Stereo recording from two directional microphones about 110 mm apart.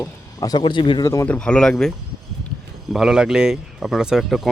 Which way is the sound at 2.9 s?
5° right (ahead or behind).